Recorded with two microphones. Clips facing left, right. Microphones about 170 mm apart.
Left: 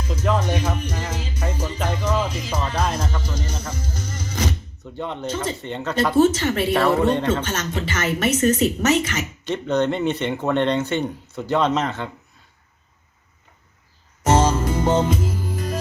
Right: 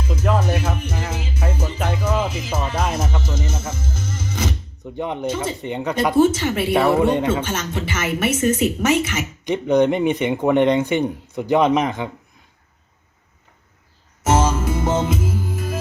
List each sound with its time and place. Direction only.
0.0 s music: 10° right (ahead or behind)
4.9 s speech: 15° right (ahead or behind)
14.3 s music: 10° right (ahead or behind)